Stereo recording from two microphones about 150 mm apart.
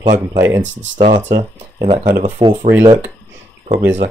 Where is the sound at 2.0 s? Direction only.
60° right (ahead or behind).